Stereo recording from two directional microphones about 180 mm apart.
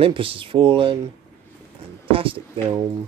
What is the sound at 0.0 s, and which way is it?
Speech, 30° right (ahead or behind).